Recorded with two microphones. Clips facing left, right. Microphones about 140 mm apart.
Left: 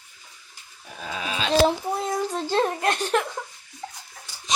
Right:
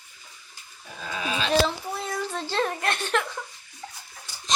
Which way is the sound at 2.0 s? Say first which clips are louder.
Left 4 dB; 15° left (ahead or behind).